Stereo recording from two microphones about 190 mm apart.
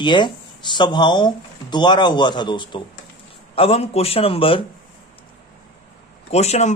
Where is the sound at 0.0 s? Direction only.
25° left (ahead or behind).